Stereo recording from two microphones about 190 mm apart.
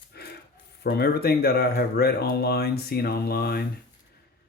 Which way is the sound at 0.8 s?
60° left (ahead or behind).